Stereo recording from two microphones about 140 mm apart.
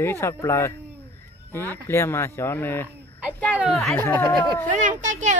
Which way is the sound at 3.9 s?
15° left (ahead or behind).